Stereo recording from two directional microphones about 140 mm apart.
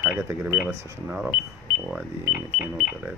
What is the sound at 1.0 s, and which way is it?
Speech, 10° right (ahead or behind).